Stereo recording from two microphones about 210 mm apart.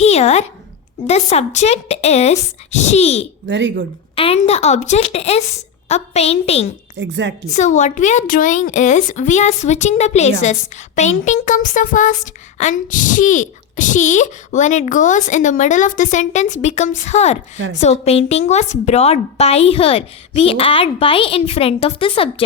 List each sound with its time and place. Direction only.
0.0 s a sound: 30° left (ahead or behind)
1.0 s speech: 30° left (ahead or behind)
3.4 s speech: 60° right (ahead or behind)
4.1 s a woman's voice: 25° left (ahead or behind)
6.9 s speech: 55° right (ahead or behind)
7.5 s a woman's voice: 35° left (ahead or behind)